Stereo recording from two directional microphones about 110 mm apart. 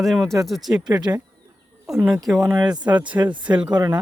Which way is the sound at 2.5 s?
40° right (ahead or behind).